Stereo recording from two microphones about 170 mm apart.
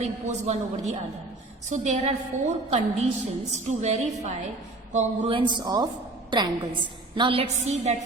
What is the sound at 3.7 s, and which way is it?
A woman's voice, 45° right (ahead or behind).